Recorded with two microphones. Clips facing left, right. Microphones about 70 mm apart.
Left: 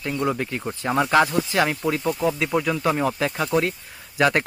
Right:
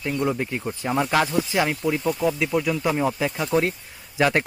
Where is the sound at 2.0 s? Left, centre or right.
Centre.